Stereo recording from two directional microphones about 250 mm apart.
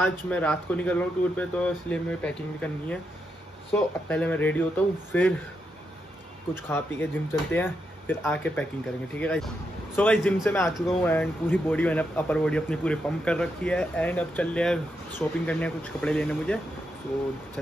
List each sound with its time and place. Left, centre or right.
0.0 s speech: centre
6.5 s speech: centre